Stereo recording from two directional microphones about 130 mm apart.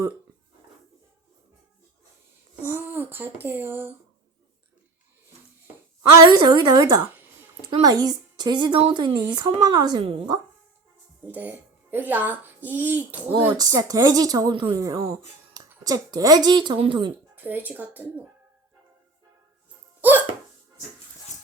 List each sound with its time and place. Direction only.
2.6 s a child's voice: 15° right (ahead or behind)
6.5 s a woman's voice: 30° right (ahead or behind)
11.3 s a child's voice: 15° right (ahead or behind)
13.5 s a woman's voice: 30° right (ahead or behind)
17.3 s a child's voice: 15° right (ahead or behind)
20.0 s hiccup: 15° right (ahead or behind)